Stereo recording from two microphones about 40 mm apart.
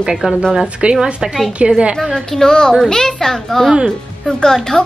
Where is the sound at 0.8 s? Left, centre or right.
Right.